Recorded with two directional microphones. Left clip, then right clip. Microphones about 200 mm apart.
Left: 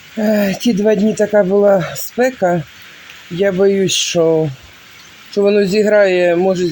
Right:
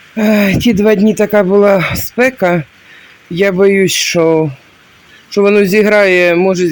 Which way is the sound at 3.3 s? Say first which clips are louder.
Right 4 dB; 25° right (ahead or behind).